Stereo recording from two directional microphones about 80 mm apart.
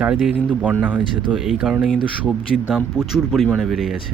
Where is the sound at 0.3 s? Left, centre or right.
Centre.